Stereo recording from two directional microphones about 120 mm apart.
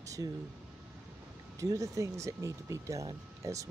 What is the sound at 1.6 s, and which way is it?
Speech, 25° right (ahead or behind).